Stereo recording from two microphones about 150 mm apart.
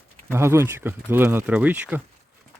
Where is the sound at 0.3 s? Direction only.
15° right (ahead or behind).